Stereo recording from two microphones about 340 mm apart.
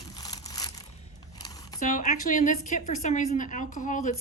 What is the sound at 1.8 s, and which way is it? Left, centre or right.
A woman's voice, left.